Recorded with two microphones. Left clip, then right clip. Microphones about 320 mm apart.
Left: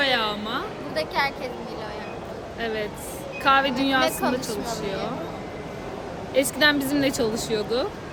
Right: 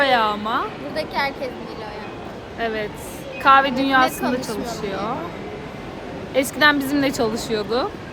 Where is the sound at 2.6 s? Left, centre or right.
Centre.